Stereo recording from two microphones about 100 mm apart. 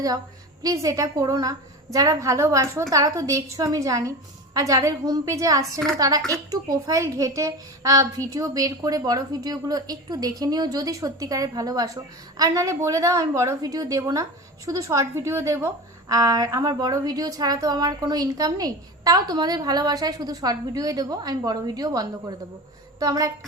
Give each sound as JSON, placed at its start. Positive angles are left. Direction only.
{"t": 0.6, "sound": "a child's voice", "side_deg": -35}